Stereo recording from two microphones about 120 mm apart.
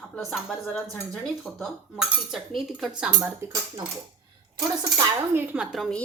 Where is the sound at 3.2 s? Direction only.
15° right (ahead or behind).